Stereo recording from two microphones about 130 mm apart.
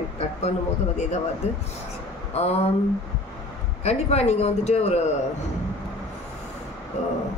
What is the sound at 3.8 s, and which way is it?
A woman's voice, 55° left (ahead or behind).